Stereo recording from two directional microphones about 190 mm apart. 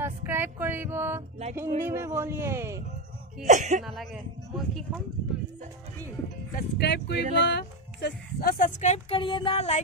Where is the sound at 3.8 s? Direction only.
Centre (ahead or behind).